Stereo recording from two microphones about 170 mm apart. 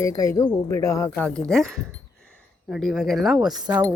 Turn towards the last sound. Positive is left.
turn(degrees=-25)  # may be behind; listen again after turning